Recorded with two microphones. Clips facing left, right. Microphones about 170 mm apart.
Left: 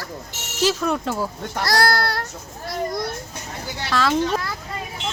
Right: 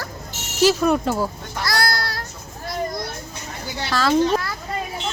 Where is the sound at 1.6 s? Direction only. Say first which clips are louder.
Left 4 dB; 40° left (ahead or behind); by 2.2 s 60° left (ahead or behind).